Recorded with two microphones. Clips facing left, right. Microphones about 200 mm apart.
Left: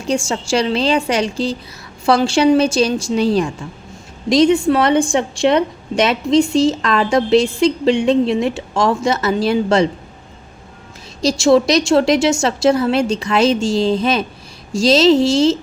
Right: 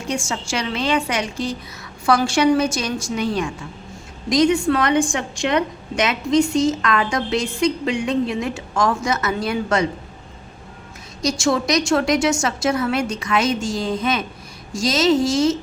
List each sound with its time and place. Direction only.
0.1 s a woman's voice: 30° left (ahead or behind)
6.3 s a woman's voice: 25° left (ahead or behind)
11.2 s a woman's voice: 30° left (ahead or behind)